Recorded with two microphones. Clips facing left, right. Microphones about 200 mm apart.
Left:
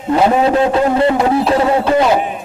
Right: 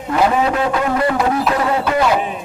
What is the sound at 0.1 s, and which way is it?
A man's voice, 30° left (ahead or behind).